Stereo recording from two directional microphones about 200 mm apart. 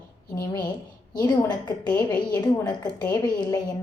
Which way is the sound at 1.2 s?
20° left (ahead or behind).